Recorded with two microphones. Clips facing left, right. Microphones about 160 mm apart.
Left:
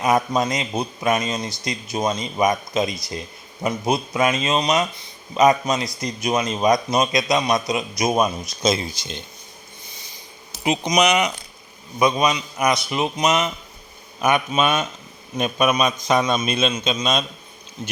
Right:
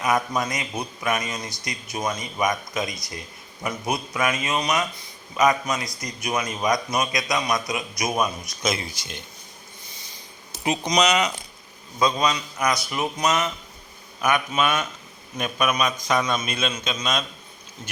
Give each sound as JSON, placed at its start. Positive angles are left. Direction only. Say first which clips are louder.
{"t": 0.0, "sound": "speech", "louder": "left 4 dB", "side_deg": 25}
{"t": 10.6, "sound": "a man's voice", "louder": "left 3 dB", "side_deg": 15}